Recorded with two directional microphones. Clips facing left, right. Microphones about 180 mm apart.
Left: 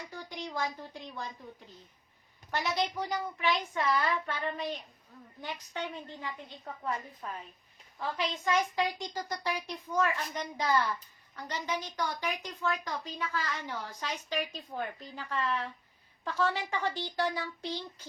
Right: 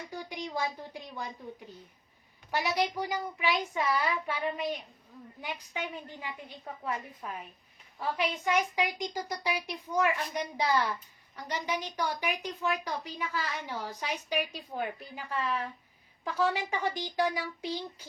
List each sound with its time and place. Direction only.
0.1 s a woman's voice: 15° right (ahead or behind)
2.5 s a child's voice: 15° right (ahead or behind)